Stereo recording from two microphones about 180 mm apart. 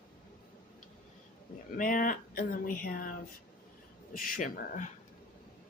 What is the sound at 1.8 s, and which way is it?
Speech, 50° left (ahead or behind).